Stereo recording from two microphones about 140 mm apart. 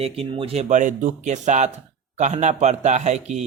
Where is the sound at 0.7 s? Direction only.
65° right (ahead or behind).